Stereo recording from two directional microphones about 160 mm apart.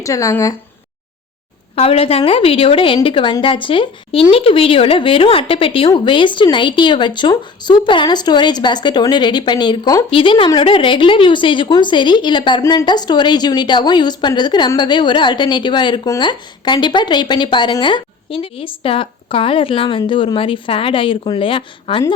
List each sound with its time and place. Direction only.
0.0 s a woman's voice: 20° left (ahead or behind)
1.7 s a woman's voice: 40° left (ahead or behind)